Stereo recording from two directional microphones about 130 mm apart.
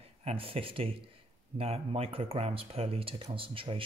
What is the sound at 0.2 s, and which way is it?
Speech, 50° right (ahead or behind).